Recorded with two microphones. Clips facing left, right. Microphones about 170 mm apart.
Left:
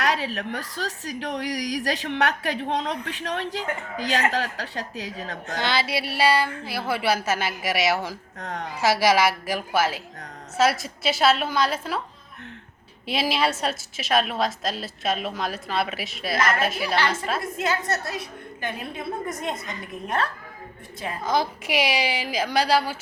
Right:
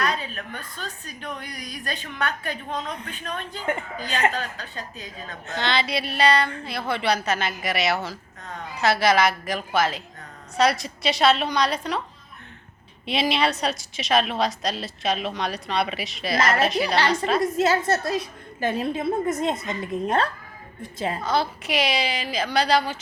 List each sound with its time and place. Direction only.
0.0 s a woman's voice: 90° left
5.5 s a woman's voice: 5° left (ahead or behind)
8.4 s a woman's voice: 80° left
8.8 s a woman's voice: 10° left (ahead or behind)
13.1 s a woman's voice: 5° left (ahead or behind)
17.6 s a woman's voice: 30° right (ahead or behind)
21.2 s a woman's voice: 10° left (ahead or behind)